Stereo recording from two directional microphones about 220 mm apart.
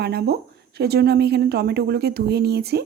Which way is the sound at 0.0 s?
45° right (ahead or behind).